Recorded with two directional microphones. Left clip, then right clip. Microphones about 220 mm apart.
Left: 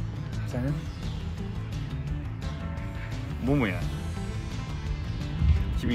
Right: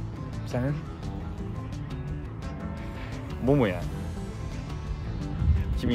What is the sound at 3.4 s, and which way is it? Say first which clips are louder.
Speech: right 4 dB; 45° right (ahead or behind).